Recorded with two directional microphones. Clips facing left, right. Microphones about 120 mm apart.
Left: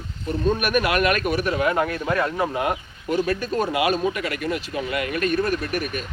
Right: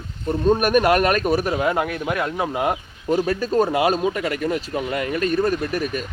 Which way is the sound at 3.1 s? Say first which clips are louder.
Right 2 dB; 40° right (ahead or behind).